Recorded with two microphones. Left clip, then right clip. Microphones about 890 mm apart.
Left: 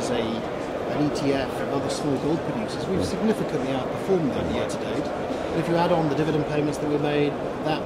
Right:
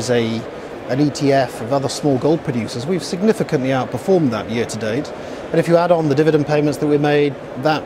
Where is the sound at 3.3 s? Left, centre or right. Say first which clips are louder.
Right 10 dB; right.